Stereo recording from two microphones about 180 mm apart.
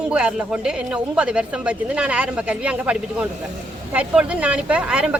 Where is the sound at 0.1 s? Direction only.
5° right (ahead or behind).